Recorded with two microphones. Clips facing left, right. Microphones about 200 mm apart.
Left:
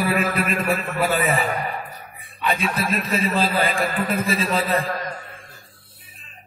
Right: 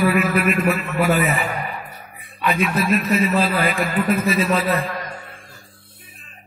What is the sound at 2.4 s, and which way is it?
A man's voice, 30° left (ahead or behind).